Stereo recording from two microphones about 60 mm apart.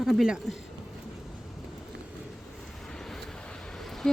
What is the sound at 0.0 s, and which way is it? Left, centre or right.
Speech, centre.